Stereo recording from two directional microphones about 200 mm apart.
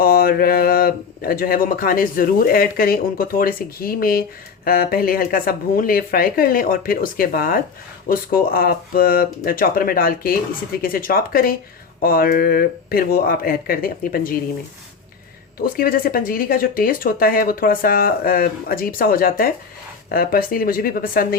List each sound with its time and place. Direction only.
0.0 s speech: 50° left (ahead or behind)
15.6 s speech: 45° left (ahead or behind)